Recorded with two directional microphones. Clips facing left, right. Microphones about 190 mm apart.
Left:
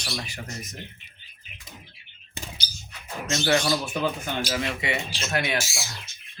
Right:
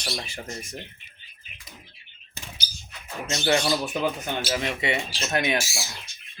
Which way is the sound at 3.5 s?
20° right (ahead or behind).